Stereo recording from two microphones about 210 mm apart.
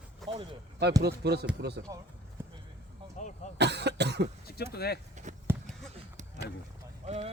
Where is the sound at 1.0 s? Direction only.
50° right (ahead or behind).